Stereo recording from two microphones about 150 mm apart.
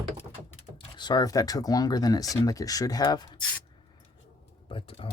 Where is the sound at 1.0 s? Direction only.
30° left (ahead or behind).